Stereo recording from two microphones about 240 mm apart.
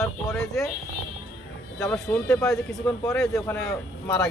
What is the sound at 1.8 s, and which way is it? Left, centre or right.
Speech, centre.